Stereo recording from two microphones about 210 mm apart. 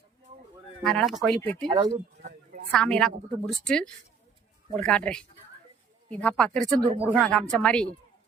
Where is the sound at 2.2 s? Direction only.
40° right (ahead or behind).